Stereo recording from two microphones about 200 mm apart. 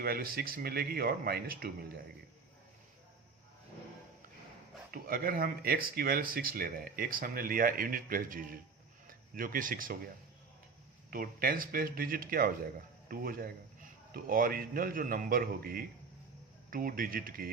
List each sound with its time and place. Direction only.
0.0 s speech: 50° right (ahead or behind)
4.9 s speech: 45° right (ahead or behind)
11.1 s speech: 45° right (ahead or behind)